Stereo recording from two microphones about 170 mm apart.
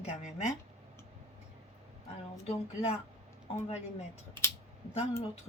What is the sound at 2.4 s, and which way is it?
Speech, 35° left (ahead or behind).